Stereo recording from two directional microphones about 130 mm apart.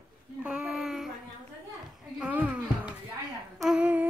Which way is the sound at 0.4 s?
10° right (ahead or behind).